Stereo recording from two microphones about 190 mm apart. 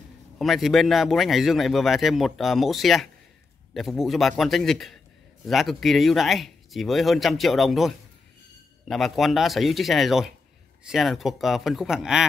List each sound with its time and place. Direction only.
0.4 s speech: centre (ahead or behind)